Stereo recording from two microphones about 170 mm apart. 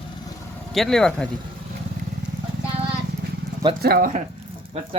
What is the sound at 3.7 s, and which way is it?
Speech, 60° right (ahead or behind).